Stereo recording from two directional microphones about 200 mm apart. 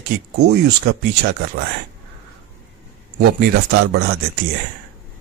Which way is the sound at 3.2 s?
50° right (ahead or behind).